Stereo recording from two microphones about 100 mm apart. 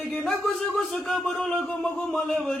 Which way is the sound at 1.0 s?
5° left (ahead or behind).